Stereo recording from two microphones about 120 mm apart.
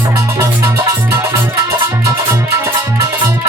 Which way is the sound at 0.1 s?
25° right (ahead or behind).